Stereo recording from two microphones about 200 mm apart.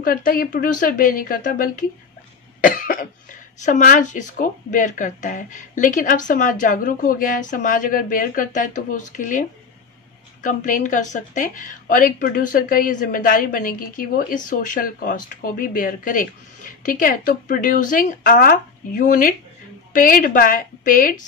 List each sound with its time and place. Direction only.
0.0 s a woman's voice: 45° left (ahead or behind)